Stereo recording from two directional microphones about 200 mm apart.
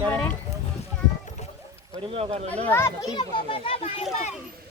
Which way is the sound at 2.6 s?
10° left (ahead or behind).